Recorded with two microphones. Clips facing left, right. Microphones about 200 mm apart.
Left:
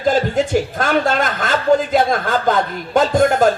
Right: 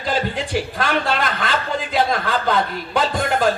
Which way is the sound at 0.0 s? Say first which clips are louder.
Left 7 dB; 45° left (ahead or behind).